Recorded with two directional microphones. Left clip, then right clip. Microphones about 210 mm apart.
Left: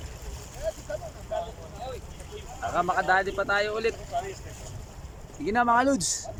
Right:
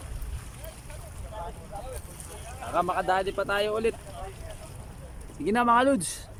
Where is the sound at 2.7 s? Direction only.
5° right (ahead or behind).